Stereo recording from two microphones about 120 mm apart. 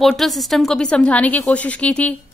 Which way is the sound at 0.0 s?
Centre (ahead or behind).